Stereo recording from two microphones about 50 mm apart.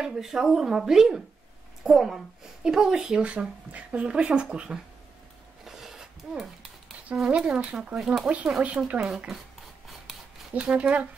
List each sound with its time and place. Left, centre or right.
0.0 s speech: centre
5.7 s a sound: centre
7.2 s speech: centre
8.7 s speech: right
10.1 s a sound: centre
10.5 s speech: right